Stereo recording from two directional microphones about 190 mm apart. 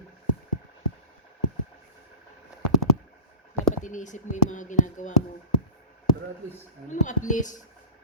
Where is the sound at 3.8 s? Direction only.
40° left (ahead or behind).